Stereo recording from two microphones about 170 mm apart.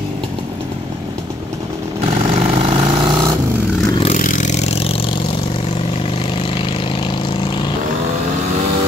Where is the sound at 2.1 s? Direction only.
45° right (ahead or behind).